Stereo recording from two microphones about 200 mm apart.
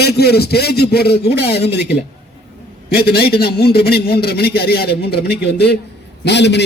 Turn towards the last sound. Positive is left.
turn(degrees=60)  # may be behind; listen again after turning